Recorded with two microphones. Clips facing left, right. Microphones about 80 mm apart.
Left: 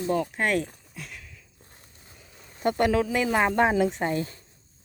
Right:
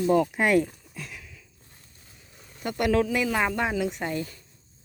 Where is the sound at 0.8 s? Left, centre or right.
Centre.